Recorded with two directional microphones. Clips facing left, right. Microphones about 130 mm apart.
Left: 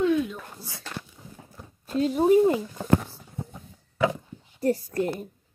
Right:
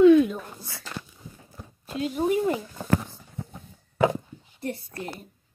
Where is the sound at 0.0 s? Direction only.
75° right (ahead or behind).